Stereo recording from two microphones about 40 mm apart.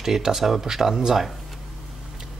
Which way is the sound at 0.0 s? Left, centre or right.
Centre.